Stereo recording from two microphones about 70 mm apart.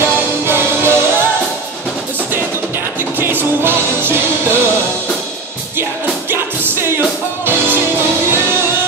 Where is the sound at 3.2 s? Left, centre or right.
Right.